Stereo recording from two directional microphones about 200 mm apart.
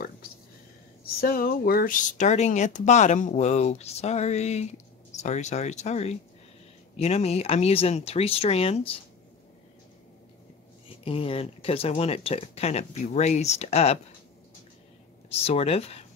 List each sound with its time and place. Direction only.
1.0 s speech: 50° left (ahead or behind); by 9.0 s 30° left (ahead or behind)
11.1 s speech: 30° left (ahead or behind)
15.2 s speech: 30° left (ahead or behind)